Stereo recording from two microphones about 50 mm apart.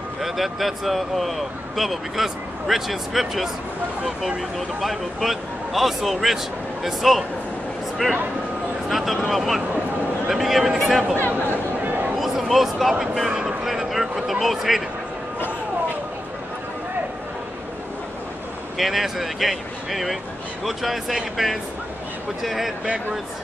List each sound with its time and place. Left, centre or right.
0.2 s speech: centre
4.6 s speech: centre
11.8 s a sound: right
12.2 s a sound: centre
13.0 s speech: centre
13.7 s speech: centre
18.8 s speech: centre